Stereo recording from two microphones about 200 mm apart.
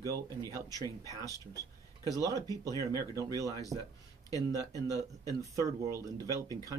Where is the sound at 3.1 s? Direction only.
15° right (ahead or behind).